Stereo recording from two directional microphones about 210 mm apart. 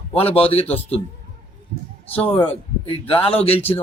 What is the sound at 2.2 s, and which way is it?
A man's voice, 25° left (ahead or behind).